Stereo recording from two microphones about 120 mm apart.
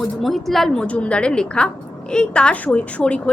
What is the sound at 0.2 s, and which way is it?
A woman's voice, centre (ahead or behind).